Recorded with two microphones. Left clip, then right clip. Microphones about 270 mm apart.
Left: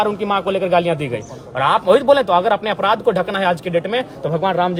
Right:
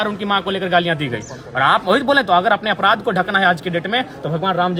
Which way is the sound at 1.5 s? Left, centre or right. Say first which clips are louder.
Left 1 dB; centre.